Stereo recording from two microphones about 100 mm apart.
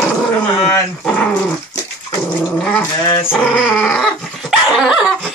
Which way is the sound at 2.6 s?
15° left (ahead or behind).